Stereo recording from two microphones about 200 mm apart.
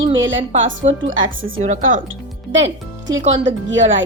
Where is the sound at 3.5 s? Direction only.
65° right (ahead or behind).